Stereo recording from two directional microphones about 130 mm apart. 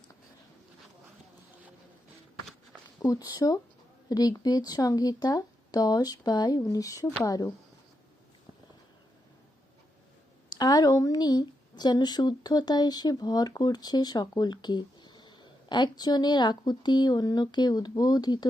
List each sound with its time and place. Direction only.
3.0 s speech: 25° left (ahead or behind)
10.6 s speech: 30° left (ahead or behind)